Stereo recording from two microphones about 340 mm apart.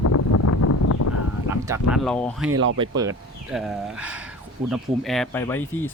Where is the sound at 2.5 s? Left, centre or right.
Right.